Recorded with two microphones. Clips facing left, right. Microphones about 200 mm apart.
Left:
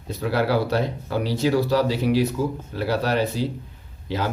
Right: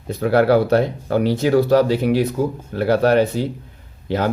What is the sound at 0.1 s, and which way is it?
Speech, 55° right (ahead or behind).